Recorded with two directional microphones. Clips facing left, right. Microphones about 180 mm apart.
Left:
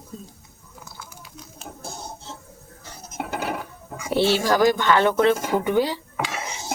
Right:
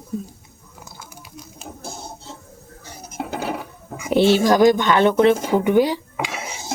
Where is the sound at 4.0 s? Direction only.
15° right (ahead or behind).